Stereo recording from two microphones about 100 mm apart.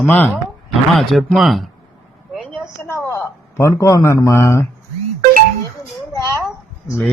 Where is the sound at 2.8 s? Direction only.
25° left (ahead or behind).